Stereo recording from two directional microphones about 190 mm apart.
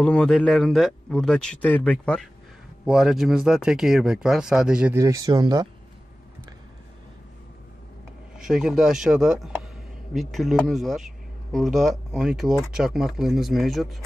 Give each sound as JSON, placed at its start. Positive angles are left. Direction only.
{"t": 0.0, "sound": "speech", "side_deg": 5}
{"t": 4.9, "sound": "speech", "side_deg": -15}
{"t": 8.4, "sound": "speech", "side_deg": -5}